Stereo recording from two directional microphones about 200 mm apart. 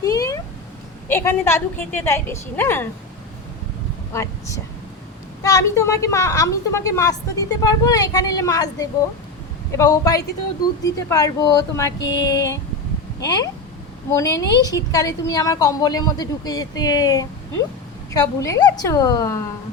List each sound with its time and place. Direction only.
0.0 s cat: 15° left (ahead or behind)
1.0 s a woman's voice: 10° left (ahead or behind)
4.1 s a woman's voice: 15° left (ahead or behind)